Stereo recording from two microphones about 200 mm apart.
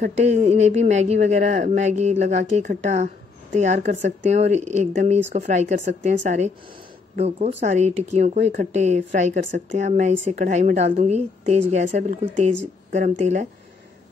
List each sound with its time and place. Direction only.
0.0 s speech: 35° right (ahead or behind)